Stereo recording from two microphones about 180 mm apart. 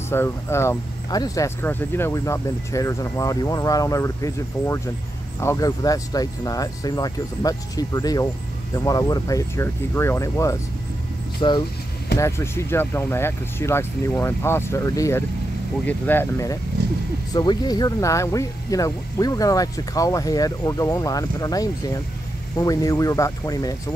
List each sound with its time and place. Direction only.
0.1 s speech: 15° left (ahead or behind)
11.4 s speech: 25° left (ahead or behind)
12.2 s speech: 15° left (ahead or behind)